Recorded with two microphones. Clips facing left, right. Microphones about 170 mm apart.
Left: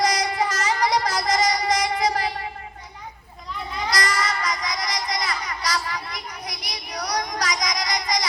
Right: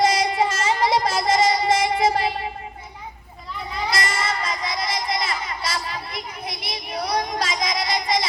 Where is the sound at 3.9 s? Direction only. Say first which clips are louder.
Left 1 dB; 25° right (ahead or behind).